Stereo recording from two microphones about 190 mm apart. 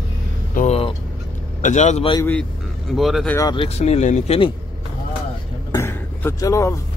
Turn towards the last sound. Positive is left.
turn(degrees=15)  # may be behind; listen again after turning